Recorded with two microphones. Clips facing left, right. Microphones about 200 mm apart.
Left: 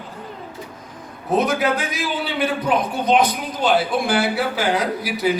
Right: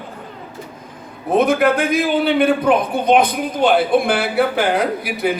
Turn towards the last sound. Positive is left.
turn(degrees=-55)  # may be behind; listen again after turning